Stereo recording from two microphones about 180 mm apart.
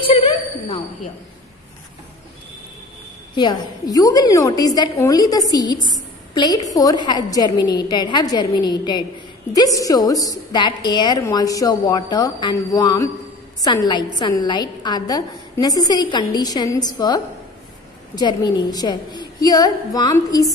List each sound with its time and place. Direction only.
3.3 s a woman's voice: 20° left (ahead or behind)